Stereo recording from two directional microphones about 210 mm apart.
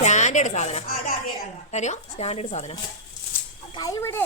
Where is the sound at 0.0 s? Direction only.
35° left (ahead or behind).